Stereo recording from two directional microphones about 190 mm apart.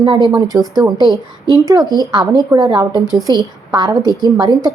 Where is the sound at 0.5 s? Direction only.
20° right (ahead or behind).